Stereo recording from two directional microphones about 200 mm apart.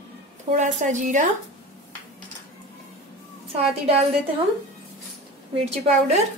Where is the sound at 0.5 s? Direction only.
40° right (ahead or behind).